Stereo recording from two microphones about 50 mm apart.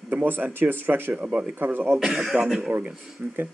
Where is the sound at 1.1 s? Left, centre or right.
Right.